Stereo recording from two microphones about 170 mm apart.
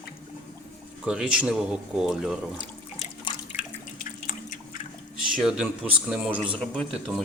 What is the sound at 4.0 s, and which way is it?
Drip, 55° left (ahead or behind).